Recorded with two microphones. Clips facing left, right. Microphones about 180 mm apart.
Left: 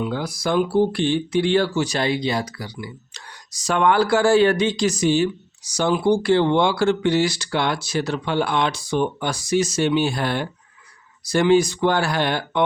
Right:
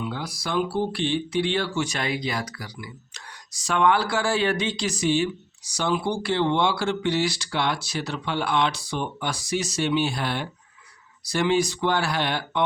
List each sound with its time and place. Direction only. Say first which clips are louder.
0.1 s speech: left 6 dB; 50° left (ahead or behind); by 2.9 s 30° left (ahead or behind)
3.5 s speech: left 3 dB; 40° left (ahead or behind)